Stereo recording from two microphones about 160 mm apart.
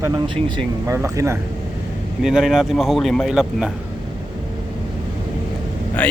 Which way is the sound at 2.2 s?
Centre (ahead or behind).